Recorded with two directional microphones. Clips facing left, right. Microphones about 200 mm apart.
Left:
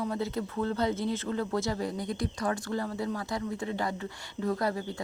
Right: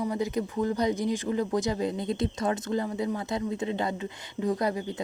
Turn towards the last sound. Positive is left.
turn(degrees=-20)  # may be behind; listen again after turning